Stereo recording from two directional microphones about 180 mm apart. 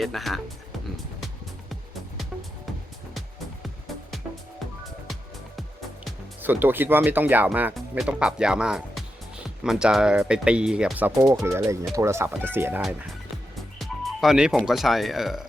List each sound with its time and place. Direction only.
0.0 s speech: centre (ahead or behind)
6.4 s speech: 10° right (ahead or behind)
13.7 s speech: centre (ahead or behind)